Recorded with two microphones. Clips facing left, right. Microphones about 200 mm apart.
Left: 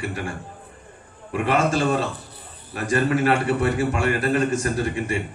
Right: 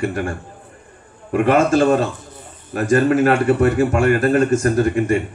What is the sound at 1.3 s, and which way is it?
A man's voice, 45° right (ahead or behind).